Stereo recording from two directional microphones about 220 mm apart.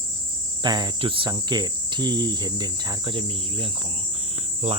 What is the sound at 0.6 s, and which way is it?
Cricket, 20° right (ahead or behind).